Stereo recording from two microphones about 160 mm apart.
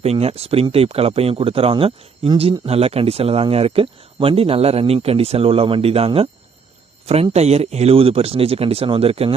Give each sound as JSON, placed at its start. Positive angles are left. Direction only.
{"t": 0.0, "sound": "speech", "side_deg": -40}